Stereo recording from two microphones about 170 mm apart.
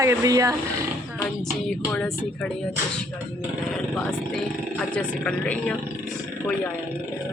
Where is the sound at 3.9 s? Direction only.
5° left (ahead or behind).